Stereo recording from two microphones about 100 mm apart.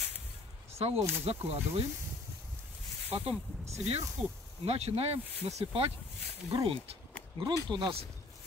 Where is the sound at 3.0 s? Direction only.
80° right.